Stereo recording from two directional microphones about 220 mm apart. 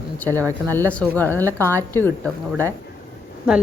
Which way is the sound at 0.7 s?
5° left (ahead or behind).